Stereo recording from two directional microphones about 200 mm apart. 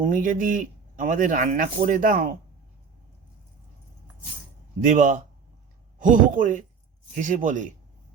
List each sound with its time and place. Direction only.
0.0 s speech: 40° right (ahead or behind)
4.8 s speech: 40° right (ahead or behind)